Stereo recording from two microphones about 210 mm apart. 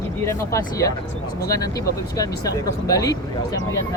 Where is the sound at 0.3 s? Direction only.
15° left (ahead or behind).